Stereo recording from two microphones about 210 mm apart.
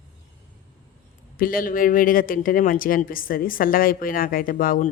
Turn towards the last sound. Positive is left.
turn(degrees=40)  # may be behind; listen again after turning